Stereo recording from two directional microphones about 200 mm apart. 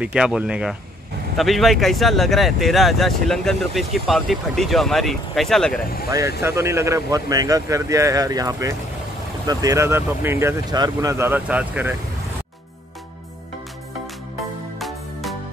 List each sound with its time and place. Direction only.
0.0 s speech: 5° right (ahead or behind)
6.0 s speech: 15° right (ahead or behind)
14.8 s music: centre (ahead or behind)